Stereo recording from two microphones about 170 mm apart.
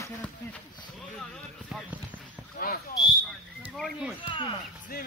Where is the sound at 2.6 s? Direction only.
60° left (ahead or behind).